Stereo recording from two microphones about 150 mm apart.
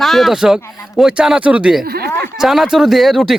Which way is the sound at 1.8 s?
90° right.